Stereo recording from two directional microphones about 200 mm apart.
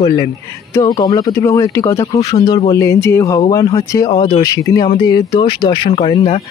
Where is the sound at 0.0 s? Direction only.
20° left (ahead or behind).